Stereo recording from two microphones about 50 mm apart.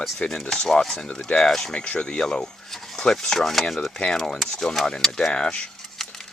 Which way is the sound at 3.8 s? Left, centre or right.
Centre.